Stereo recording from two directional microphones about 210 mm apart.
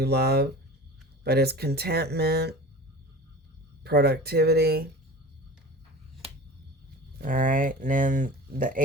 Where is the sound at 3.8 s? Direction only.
50° right (ahead or behind).